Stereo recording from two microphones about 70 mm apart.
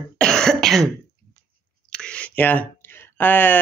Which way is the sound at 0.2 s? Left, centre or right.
Centre.